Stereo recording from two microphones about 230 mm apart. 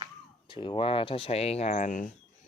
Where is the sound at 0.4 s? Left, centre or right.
Left.